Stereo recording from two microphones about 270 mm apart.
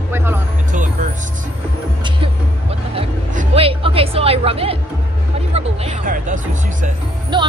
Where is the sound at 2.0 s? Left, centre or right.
Right.